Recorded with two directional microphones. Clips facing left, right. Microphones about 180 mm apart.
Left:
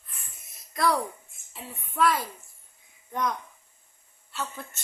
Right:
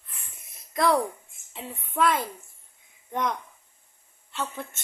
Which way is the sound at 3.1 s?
20° right (ahead or behind).